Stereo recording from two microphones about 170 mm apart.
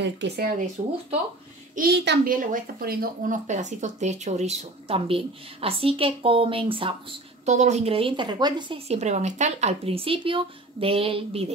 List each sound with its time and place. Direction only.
0.0 s speech: 80° right
1.8 s a child's voice: 75° right (ahead or behind)
2.2 s speech: 55° right (ahead or behind); by 7.5 s 30° right (ahead or behind)
7.5 s speech: 40° right (ahead or behind)